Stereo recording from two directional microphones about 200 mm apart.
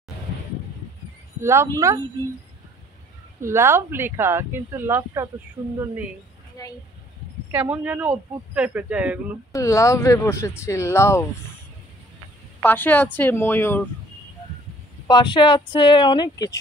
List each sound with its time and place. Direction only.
1.4 s speech: 15° right (ahead or behind)
3.3 s speech: 15° right (ahead or behind)
7.5 s speech: 10° right (ahead or behind)
9.5 s speech: 15° left (ahead or behind)
12.6 s speech: 10° left (ahead or behind)
15.0 s speech: 20° left (ahead or behind)